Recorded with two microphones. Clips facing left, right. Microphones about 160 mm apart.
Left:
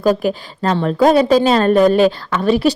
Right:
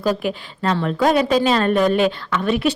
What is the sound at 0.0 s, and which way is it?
A woman's voice, 40° left (ahead or behind).